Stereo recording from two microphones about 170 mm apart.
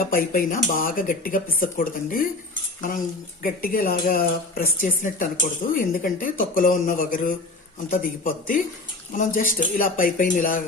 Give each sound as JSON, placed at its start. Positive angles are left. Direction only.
{"t": 0.0, "sound": "speech", "side_deg": 60}
{"t": 3.4, "sound": "speech", "side_deg": 55}